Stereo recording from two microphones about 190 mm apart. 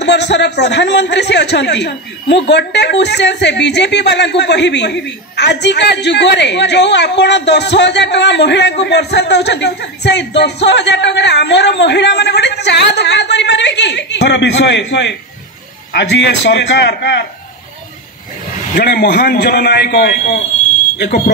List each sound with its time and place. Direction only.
0.0 s a man's voice: 65° left (ahead or behind)
18.8 s a man's voice: 60° left (ahead or behind)